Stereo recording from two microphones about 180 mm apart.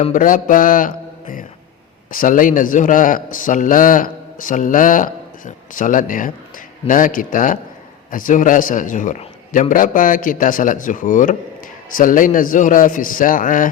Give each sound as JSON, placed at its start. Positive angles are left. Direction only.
{"t": 0.0, "sound": "a man's voice", "side_deg": 45}